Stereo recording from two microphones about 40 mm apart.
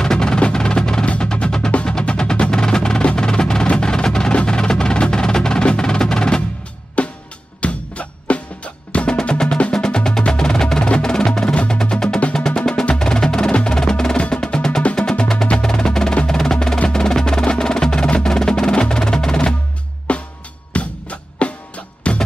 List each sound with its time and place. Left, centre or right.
0.0 s music: centre
1.0 s music: left
1.3 s music: centre
7.0 s music: left
9.7 s percussion: left
11.5 s music: left
12.8 s percussion: left
14.1 s percussion: left
14.4 s music: centre
15.6 s percussion: centre
16.9 s wood block: centre
17.5 s percussion: centre
20.1 s music: left